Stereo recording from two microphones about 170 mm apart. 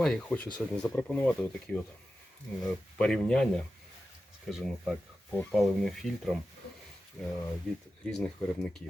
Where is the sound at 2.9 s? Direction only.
5° left (ahead or behind).